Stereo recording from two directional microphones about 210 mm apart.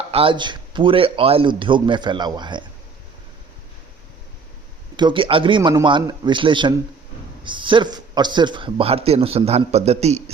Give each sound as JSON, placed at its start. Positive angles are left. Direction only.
{"t": 0.1, "sound": "a man's voice", "side_deg": -25}
{"t": 4.9, "sound": "a man's voice", "side_deg": -25}